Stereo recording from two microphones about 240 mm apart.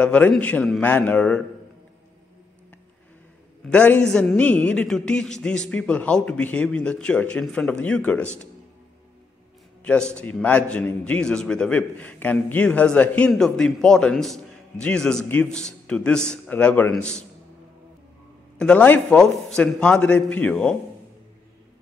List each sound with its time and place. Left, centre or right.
0.0 s a man's voice: centre
3.6 s a man's voice: centre
9.8 s a man's voice: centre
18.6 s a man's voice: centre